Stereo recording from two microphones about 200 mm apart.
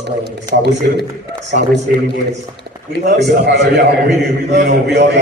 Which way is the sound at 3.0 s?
60° right (ahead or behind).